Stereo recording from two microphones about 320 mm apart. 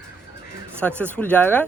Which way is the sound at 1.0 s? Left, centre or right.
Centre.